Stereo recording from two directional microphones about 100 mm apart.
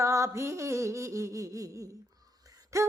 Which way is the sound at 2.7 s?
30° right (ahead or behind).